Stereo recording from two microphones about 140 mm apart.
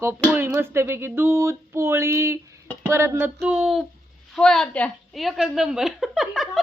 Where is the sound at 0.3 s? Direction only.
15° right (ahead or behind).